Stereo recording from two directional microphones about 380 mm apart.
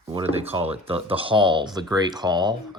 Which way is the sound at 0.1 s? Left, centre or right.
Centre.